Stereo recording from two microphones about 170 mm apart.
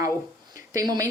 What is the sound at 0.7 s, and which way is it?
Speech, 20° right (ahead or behind).